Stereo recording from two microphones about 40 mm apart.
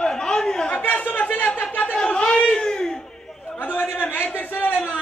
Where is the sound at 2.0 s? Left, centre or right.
Left.